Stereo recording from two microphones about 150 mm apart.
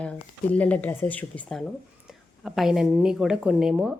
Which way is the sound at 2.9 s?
15° right (ahead or behind).